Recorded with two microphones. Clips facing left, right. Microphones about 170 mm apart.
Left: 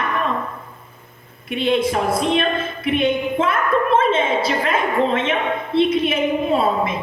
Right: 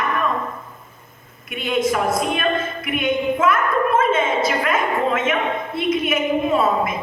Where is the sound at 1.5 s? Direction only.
30° left (ahead or behind).